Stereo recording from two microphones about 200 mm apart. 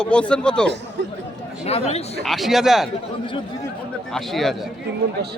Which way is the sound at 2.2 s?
Centre (ahead or behind).